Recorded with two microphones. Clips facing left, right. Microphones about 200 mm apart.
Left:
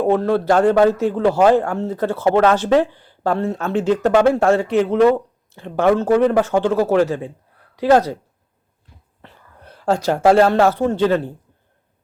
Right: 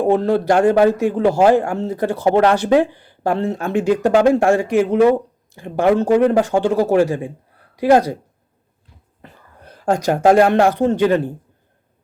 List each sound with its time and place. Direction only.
0.0 s speech: 15° right (ahead or behind)
9.2 s speech: 15° right (ahead or behind)